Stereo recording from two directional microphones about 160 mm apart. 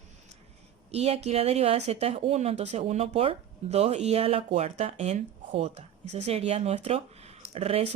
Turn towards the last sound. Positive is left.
turn(degrees=-40)  # may be behind; listen again after turning